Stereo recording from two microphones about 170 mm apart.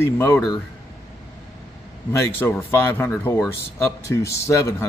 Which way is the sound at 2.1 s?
10° left (ahead or behind).